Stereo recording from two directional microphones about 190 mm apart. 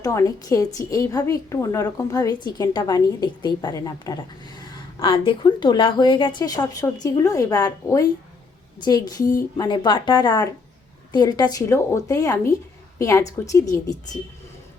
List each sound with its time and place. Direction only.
0.0 s a woman's voice: 15° left (ahead or behind)